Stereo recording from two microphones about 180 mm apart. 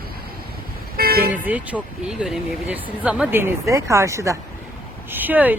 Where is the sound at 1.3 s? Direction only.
10° right (ahead or behind).